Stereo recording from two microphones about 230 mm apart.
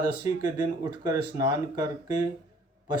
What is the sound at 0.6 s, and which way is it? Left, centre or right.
Speech, centre.